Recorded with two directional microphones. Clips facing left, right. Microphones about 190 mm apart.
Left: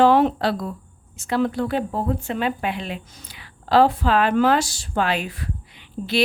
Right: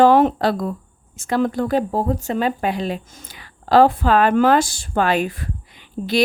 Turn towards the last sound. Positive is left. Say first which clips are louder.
# right 3 dB
turn(degrees=-45)  # may be behind; listen again after turning